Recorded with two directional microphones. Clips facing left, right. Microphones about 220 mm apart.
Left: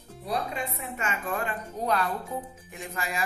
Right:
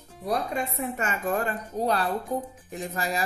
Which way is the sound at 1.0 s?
40° right (ahead or behind).